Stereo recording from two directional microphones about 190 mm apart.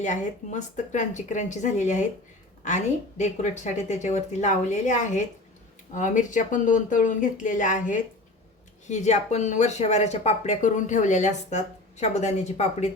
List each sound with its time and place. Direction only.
0.0 s speech: 40° left (ahead or behind)